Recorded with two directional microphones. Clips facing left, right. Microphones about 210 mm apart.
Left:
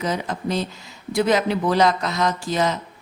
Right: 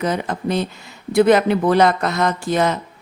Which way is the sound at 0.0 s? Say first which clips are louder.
Right 3 dB; 55° right (ahead or behind).